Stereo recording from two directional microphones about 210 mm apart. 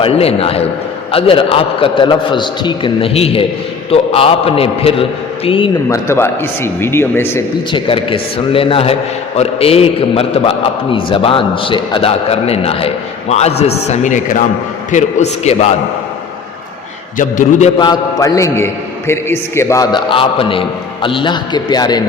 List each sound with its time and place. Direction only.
0.0 s a man's voice: 30° left (ahead or behind)
6.1 s a man's voice: 10° left (ahead or behind)
7.7 s a man's voice: 25° left (ahead or behind)
17.2 s speech: 40° left (ahead or behind)
17.7 s a man's voice: 20° left (ahead or behind)